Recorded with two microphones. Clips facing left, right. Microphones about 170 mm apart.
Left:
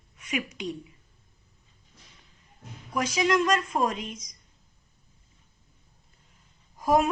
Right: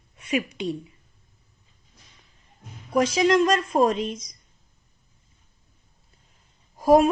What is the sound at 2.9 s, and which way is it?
A woman's voice, 30° right (ahead or behind).